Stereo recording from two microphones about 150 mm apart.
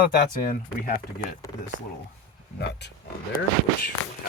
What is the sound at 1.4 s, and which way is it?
Speech, 20° left (ahead or behind).